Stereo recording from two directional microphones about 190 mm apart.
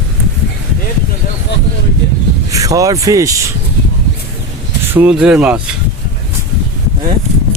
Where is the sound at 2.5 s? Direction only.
15° right (ahead or behind).